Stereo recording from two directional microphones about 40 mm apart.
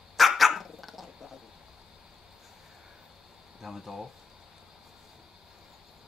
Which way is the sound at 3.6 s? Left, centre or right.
Centre.